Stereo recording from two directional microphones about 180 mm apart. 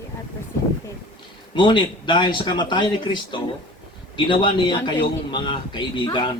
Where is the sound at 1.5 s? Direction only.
25° left (ahead or behind).